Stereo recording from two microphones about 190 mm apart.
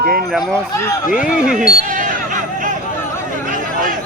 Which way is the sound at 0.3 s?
Centre (ahead or behind).